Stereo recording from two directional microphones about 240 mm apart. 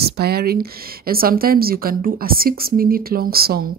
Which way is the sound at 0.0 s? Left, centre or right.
Right.